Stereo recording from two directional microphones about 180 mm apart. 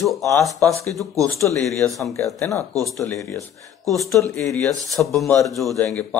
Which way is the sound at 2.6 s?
20° right (ahead or behind).